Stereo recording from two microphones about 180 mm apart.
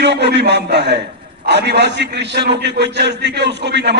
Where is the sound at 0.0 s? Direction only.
70° right (ahead or behind).